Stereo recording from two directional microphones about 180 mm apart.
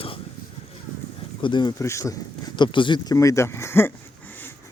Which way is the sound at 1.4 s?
25° left (ahead or behind).